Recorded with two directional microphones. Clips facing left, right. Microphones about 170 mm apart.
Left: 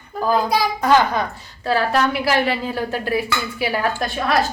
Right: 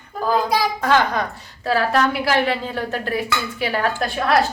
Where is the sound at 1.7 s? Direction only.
Centre (ahead or behind).